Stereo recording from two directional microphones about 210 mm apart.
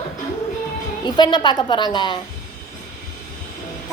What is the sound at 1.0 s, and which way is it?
A woman's voice, 20° left (ahead or behind).